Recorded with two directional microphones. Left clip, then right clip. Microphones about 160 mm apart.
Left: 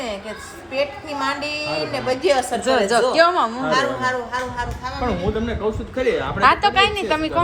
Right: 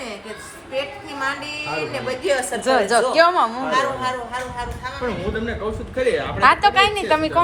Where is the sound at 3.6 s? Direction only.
85° left.